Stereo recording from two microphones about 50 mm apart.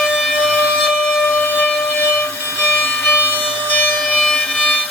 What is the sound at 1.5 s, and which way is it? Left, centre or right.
Civil defense siren, left.